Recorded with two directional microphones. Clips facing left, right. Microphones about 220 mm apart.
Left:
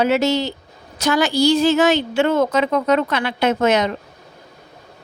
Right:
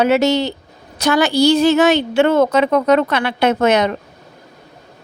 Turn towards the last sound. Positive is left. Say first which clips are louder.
# right 2 dB
turn(degrees=-60)  # may be behind; listen again after turning